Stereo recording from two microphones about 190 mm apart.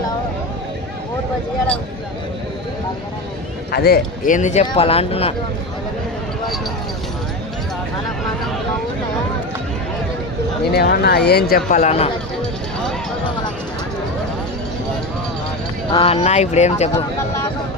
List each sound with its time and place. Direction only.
3.7 s speech: 55° left (ahead or behind); by 5.3 s 30° left (ahead or behind)
10.7 s speech: 55° left (ahead or behind); by 12.1 s 35° left (ahead or behind)
15.9 s speech: 30° left (ahead or behind)